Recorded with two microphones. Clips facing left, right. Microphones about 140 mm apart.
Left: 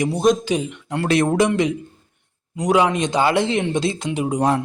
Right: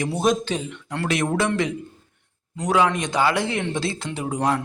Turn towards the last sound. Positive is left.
turn(degrees=20)  # may be behind; listen again after turning